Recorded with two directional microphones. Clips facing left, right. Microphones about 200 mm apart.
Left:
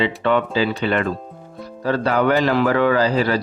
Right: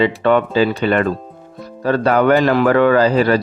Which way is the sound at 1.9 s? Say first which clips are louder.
Right 4 dB; 50° right (ahead or behind).